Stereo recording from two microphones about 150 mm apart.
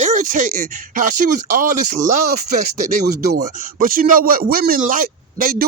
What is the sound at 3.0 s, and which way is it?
A man's voice, 90° right.